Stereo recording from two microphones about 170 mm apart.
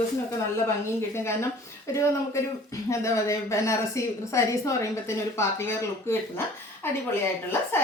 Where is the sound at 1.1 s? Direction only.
15° left (ahead or behind).